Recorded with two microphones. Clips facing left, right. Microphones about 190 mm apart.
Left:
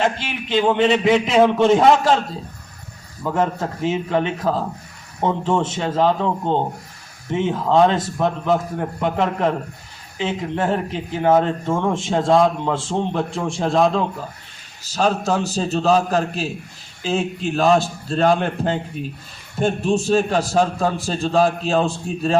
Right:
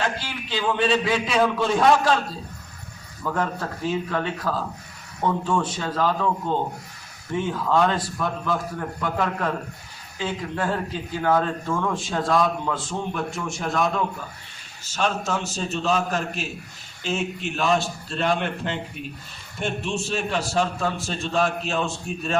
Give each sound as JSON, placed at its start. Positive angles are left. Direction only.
{"t": 0.0, "sound": "speech", "side_deg": 20}
{"t": 3.2, "sound": "a man's voice", "side_deg": 25}